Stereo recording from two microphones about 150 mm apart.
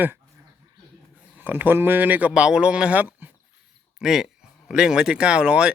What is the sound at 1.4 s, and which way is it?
Speech, 15° right (ahead or behind).